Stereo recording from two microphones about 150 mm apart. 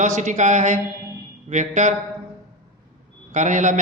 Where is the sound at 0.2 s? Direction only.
55° right (ahead or behind).